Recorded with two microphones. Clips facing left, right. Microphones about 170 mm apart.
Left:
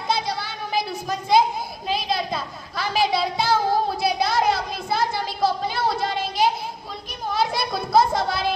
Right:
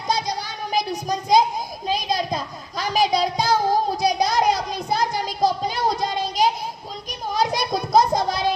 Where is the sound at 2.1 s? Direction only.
15° right (ahead or behind).